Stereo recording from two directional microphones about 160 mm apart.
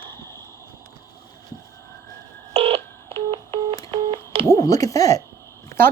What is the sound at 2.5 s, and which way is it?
Telephone dialing, 40° right (ahead or behind).